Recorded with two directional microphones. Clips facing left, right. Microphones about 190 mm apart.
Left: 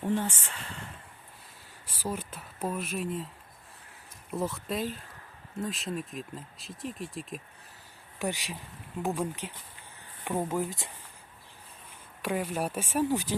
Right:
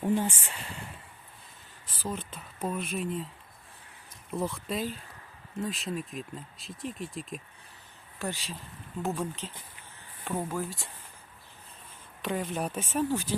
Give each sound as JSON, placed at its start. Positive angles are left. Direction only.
{"t": 0.1, "sound": "speech", "side_deg": -15}
{"t": 1.9, "sound": "speech", "side_deg": 10}
{"t": 4.3, "sound": "speech", "side_deg": 0}
{"t": 8.2, "sound": "speech", "side_deg": 15}
{"t": 12.2, "sound": "speech", "side_deg": 10}